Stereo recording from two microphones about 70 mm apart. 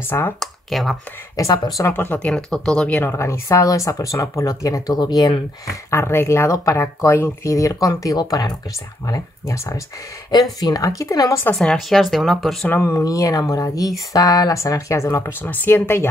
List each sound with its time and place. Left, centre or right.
0.0 s speech: left
0.4 s speech: centre
1.8 s speech: left
2.1 s speech: centre
3.2 s speech: left
4.9 s speech: left
5.9 s speech: left
7.4 s speech: left
9.0 s speech: left
10.3 s speech: left
11.5 s speech: centre
12.6 s speech: left
12.9 s speech: left
15.4 s speech: left